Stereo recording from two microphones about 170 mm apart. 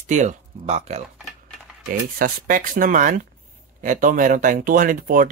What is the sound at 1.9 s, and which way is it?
Speech, 55° right (ahead or behind).